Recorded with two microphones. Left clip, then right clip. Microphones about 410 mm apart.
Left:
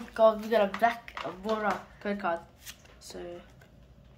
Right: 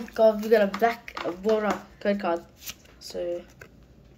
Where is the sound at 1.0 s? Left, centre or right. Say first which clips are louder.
Right 7 dB; left.